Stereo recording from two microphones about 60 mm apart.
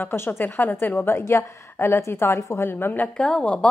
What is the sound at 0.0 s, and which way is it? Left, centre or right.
A woman's voice, left.